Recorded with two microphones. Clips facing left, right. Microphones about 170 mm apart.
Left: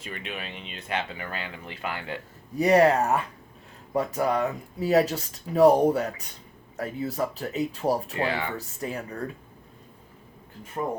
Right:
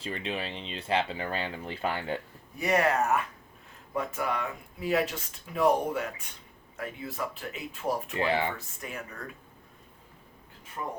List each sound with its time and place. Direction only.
0.0 s speech: 30° right (ahead or behind)
2.6 s speech: 35° left (ahead or behind)
8.3 s speech: 25° right (ahead or behind)
8.5 s speech: 35° left (ahead or behind)
10.8 s speech: 40° left (ahead or behind)